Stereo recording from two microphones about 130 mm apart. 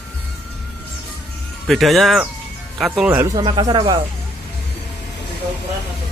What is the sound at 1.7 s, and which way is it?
Speech, centre (ahead or behind).